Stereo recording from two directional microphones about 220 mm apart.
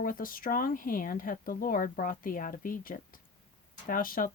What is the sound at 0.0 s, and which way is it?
Speech, 40° left (ahead or behind).